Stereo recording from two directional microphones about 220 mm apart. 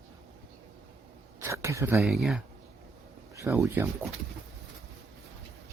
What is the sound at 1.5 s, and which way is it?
Speech, 15° right (ahead or behind).